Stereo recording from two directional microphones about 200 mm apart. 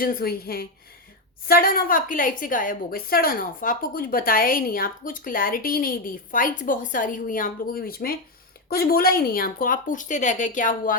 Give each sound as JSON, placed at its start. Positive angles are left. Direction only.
{"t": 0.0, "sound": "a woman's voice", "side_deg": 45}